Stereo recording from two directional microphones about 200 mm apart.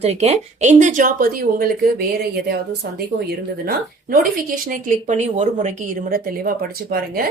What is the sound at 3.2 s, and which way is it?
A woman's voice, 50° right (ahead or behind).